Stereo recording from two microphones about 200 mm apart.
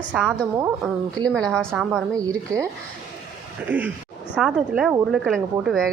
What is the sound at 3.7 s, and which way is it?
A woman's voice, 10° right (ahead or behind).